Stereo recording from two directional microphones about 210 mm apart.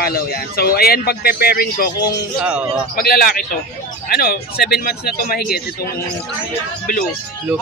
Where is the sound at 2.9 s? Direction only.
45° left (ahead or behind).